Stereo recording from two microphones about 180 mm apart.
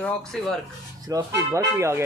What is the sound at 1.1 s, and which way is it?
Speech, 20° right (ahead or behind).